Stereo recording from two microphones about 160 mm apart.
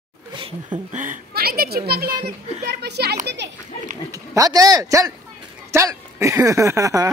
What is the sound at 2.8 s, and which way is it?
Speech, 90° right.